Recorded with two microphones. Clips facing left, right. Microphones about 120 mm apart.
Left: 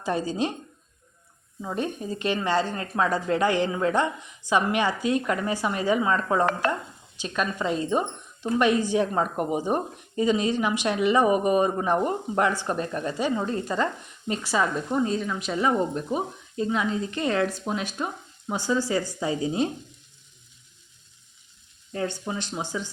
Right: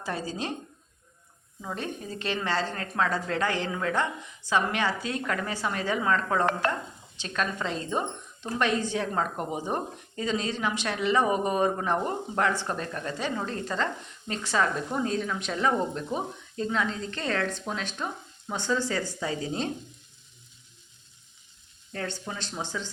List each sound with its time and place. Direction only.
0.0 s speech: 20° left (ahead or behind)
1.6 s speech: 15° left (ahead or behind)
21.9 s speech: 15° left (ahead or behind)